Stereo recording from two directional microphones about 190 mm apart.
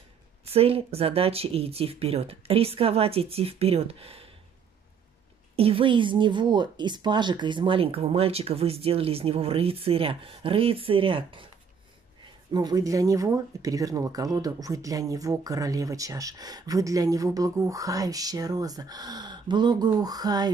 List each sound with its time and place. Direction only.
0.5 s speech: 30° right (ahead or behind)
5.6 s speech: 30° right (ahead or behind)
12.5 s speech: 20° right (ahead or behind)